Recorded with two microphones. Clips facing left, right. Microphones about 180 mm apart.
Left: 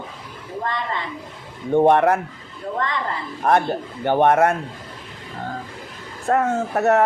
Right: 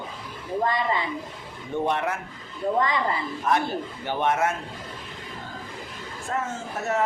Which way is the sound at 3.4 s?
55° left (ahead or behind).